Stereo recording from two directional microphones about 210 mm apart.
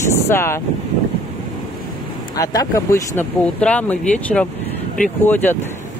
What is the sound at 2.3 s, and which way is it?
Speech, 15° left (ahead or behind).